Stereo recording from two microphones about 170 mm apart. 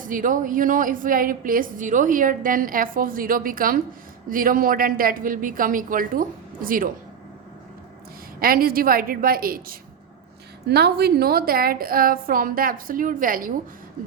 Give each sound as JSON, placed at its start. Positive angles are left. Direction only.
{"t": 0.0, "sound": "a woman's voice", "side_deg": -50}
{"t": 8.4, "sound": "a woman's voice", "side_deg": -60}
{"t": 10.7, "sound": "a woman's voice", "side_deg": -70}